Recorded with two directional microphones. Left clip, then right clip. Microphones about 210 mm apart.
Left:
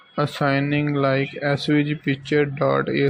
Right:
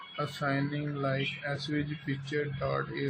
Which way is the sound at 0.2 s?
45° left (ahead or behind).